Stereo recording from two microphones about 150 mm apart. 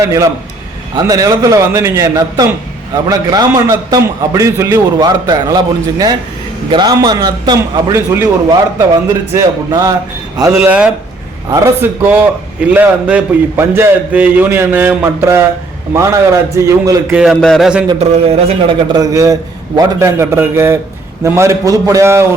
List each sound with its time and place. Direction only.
0.0 s a man's voice: 20° right (ahead or behind)
10.6 s a man's voice: 5° right (ahead or behind)
11.4 s a man's voice: 20° right (ahead or behind)
17.2 s a man's voice: centre (ahead or behind)
18.9 s a man's voice: 20° right (ahead or behind)